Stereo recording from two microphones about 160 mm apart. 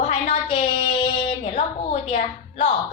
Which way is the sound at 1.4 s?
45° left (ahead or behind).